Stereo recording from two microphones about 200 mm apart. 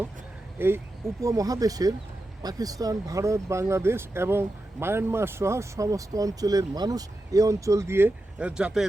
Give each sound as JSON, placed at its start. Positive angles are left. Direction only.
{"t": 0.6, "sound": "speech", "side_deg": -10}